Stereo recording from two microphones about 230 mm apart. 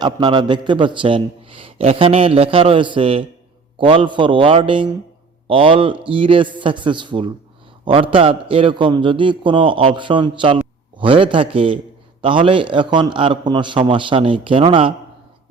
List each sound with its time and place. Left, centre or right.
0.0 s a man's voice: centre